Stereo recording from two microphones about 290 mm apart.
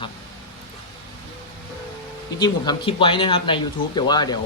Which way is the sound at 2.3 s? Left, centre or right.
Centre.